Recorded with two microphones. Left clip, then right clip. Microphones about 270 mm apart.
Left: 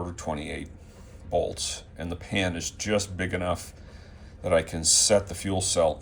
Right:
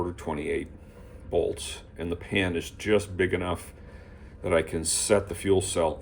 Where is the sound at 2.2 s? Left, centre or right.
Centre.